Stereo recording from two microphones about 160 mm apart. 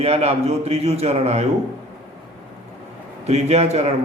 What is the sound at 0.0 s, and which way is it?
A man's voice, 40° right (ahead or behind).